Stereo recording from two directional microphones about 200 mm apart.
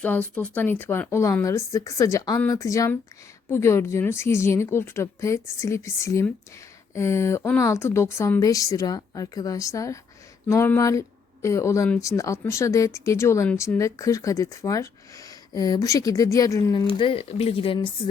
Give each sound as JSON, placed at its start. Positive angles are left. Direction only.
{"t": 0.0, "sound": "speech", "side_deg": 10}